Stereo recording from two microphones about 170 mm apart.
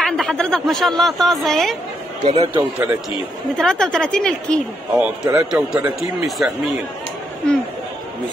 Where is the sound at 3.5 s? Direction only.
5° left (ahead or behind).